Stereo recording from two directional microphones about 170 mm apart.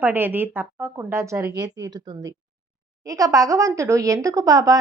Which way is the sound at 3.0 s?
20° right (ahead or behind).